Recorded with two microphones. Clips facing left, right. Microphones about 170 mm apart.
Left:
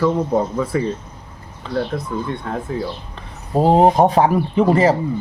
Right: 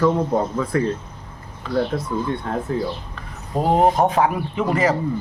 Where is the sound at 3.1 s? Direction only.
30° left (ahead or behind).